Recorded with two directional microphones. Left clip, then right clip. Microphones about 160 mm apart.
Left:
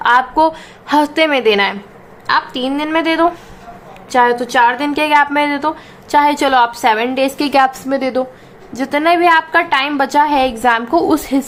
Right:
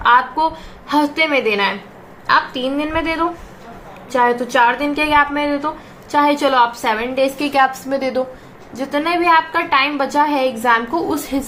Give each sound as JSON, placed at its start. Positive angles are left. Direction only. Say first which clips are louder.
{"t": 0.0, "sound": "a woman's voice", "louder": "left 2 dB", "side_deg": 50}